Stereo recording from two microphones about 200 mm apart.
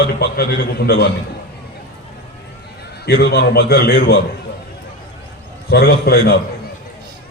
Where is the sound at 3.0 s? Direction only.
55° left (ahead or behind).